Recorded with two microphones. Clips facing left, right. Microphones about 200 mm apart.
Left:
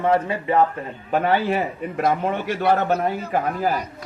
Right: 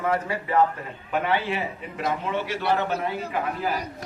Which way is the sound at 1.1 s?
40° left (ahead or behind).